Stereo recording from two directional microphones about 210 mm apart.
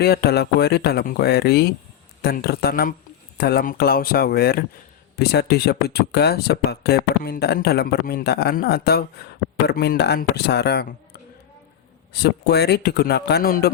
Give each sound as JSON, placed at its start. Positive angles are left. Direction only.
{"t": 0.0, "sound": "speech", "side_deg": 50}